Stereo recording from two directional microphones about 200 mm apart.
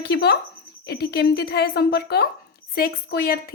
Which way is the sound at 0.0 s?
55° left (ahead or behind).